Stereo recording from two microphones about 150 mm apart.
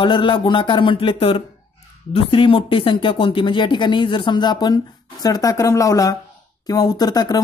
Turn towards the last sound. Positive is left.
turn(degrees=25)  # may be behind; listen again after turning